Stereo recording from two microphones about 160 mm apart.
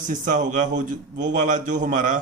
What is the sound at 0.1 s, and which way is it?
A man's voice, 55° right (ahead or behind).